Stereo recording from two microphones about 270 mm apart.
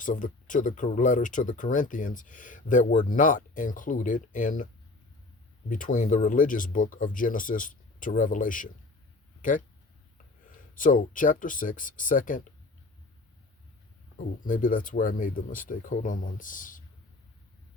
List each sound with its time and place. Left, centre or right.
0.0 s speech: left
10.8 s speech: left
14.4 s speech: left